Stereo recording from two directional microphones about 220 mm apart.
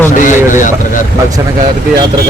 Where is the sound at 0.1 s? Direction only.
35° left (ahead or behind).